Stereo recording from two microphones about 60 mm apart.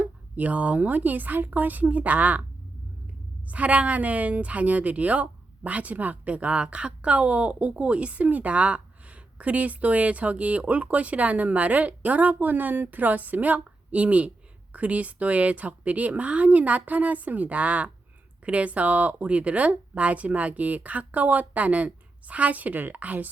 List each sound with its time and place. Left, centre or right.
0.0 s a woman's voice: right
3.5 s a woman's voice: right